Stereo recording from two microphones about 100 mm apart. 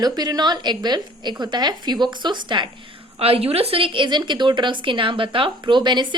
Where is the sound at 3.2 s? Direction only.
85° right.